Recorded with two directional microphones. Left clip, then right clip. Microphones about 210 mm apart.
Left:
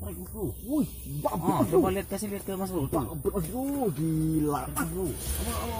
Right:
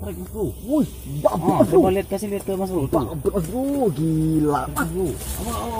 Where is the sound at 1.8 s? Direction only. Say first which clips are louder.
Right 9 dB; 25° left (ahead or behind).